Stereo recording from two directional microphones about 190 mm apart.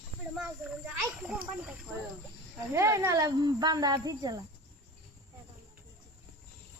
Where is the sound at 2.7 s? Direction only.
15° right (ahead or behind).